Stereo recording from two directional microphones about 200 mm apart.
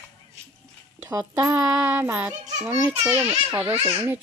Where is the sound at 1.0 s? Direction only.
15° right (ahead or behind).